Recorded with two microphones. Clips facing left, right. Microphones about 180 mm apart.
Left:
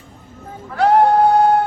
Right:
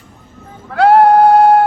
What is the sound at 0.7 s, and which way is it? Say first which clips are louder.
Bleat: right 5 dB; 70° right (ahead or behind).